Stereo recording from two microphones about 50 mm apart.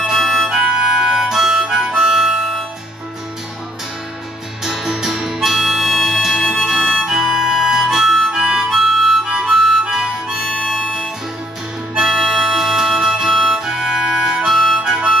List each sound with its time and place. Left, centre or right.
0.0 s music: centre
0.6 s harmonica: centre
4.6 s harmonica: centre
6.5 s music: centre
7.1 s harmonica: centre
9.2 s harmonica: centre
11.9 s harmonica: centre
14.8 s harmonica: centre